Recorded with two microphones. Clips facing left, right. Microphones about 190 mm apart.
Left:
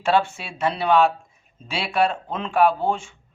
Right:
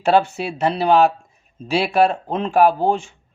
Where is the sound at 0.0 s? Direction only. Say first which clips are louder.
Right 4 dB; 40° right (ahead or behind).